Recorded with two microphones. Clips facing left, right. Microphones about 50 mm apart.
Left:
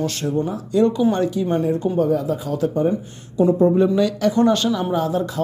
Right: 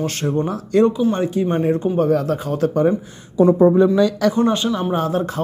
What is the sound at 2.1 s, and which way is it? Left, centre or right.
Speech, right.